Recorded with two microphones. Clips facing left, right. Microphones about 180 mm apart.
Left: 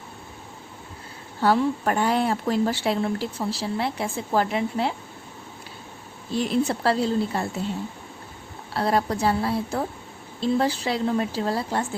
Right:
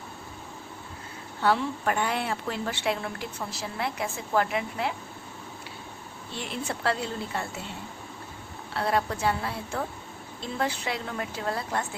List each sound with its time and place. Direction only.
1.4 s a woman's voice: 40° left (ahead or behind)
6.3 s a woman's voice: 40° left (ahead or behind)
8.7 s a woman's voice: 35° left (ahead or behind)